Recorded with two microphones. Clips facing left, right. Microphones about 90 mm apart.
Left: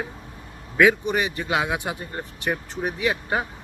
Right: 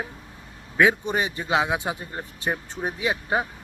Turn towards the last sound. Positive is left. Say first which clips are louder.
# even
turn(degrees=-20)  # may be behind; listen again after turning